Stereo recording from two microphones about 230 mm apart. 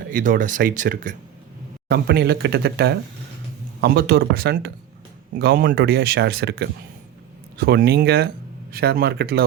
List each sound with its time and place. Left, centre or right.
0.1 s speech: right
1.9 s speech: right